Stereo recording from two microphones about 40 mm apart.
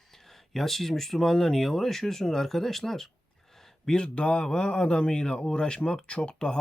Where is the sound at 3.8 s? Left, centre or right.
Left.